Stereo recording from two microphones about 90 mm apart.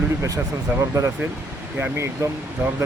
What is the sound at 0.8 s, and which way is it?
Speech, 35° right (ahead or behind).